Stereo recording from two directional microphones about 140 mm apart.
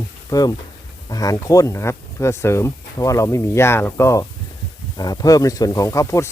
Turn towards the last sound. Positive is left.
turn(degrees=20)  # may be behind; listen again after turning